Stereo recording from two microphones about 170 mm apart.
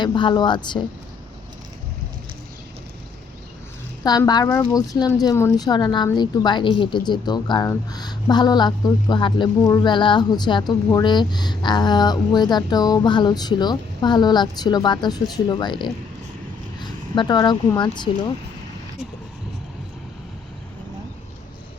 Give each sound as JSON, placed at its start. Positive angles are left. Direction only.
{"t": 0.0, "sound": "speech", "side_deg": 25}
{"t": 4.3, "sound": "speech", "side_deg": 20}